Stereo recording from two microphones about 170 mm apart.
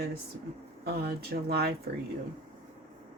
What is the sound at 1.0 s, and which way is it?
Speech, 65° right (ahead or behind).